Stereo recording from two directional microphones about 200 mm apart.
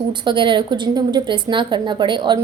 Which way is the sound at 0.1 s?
25° right (ahead or behind).